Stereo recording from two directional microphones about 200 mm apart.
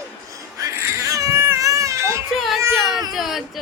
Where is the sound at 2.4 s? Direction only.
Centre (ahead or behind).